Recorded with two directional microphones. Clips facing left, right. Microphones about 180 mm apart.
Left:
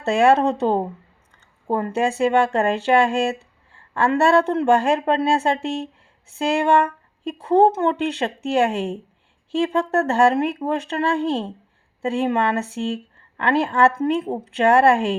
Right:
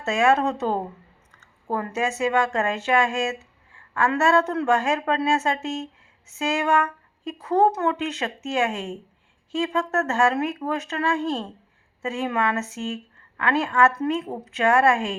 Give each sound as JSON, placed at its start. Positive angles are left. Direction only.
{"t": 0.0, "sound": "speech", "side_deg": 35}